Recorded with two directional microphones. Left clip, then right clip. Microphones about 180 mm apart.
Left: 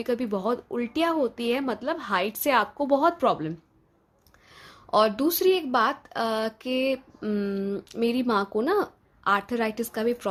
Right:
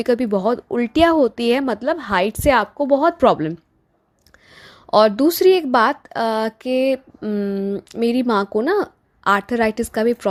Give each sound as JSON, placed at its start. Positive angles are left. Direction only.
{"t": 0.0, "sound": "speech", "side_deg": -40}